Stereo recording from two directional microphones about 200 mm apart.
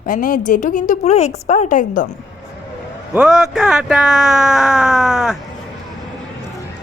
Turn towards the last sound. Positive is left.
turn(degrees=0)  # may be behind; listen again after turning